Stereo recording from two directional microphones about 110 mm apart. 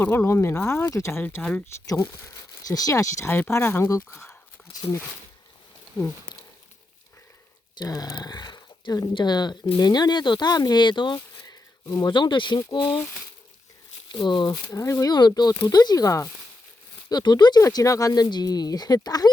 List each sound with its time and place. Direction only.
0.0 s speech: 20° left (ahead or behind)
1.2 s speech: 15° left (ahead or behind)
1.9 s speech: 30° left (ahead or behind)
4.7 s a sound: 35° left (ahead or behind)
7.8 s speech: 35° left (ahead or behind)
14.1 s speech: 45° left (ahead or behind)
14.5 s speech: 25° left (ahead or behind)
15.1 s speech: 40° left (ahead or behind)